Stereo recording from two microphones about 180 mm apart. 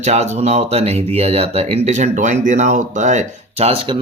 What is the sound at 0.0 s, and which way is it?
Speech, 40° right (ahead or behind).